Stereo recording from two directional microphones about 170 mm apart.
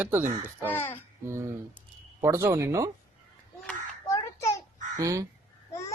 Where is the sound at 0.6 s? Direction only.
10° left (ahead or behind).